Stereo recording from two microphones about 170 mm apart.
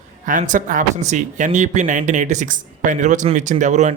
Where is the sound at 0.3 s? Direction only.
50° right (ahead or behind).